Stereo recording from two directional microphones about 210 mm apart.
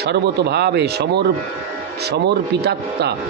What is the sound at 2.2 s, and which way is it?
Speech, 50° right (ahead or behind).